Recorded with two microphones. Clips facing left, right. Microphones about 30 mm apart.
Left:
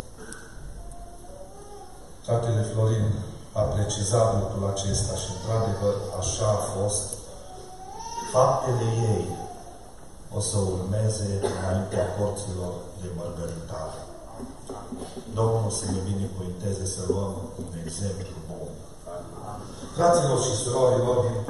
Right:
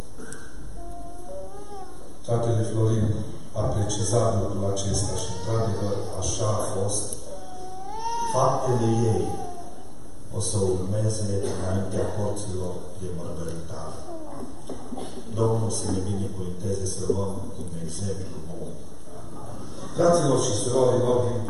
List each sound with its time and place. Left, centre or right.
2.2 s a man's voice: centre
7.9 s cat: right
8.2 s a man's voice: centre
11.3 s music: left
11.6 s a man's voice: centre
13.6 s dog: centre
15.3 s a man's voice: centre
19.4 s a man's voice: centre